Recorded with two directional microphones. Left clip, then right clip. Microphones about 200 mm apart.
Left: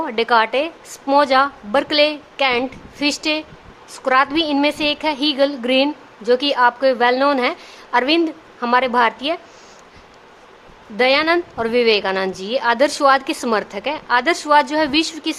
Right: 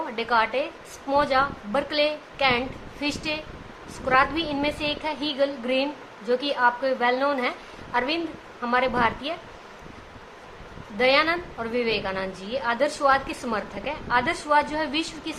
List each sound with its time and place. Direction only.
0.0 s a woman's voice: 55° left (ahead or behind)
10.9 s a woman's voice: 55° left (ahead or behind)